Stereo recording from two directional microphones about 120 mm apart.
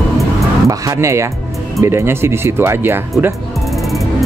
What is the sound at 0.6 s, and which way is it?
Speech, 25° right (ahead or behind).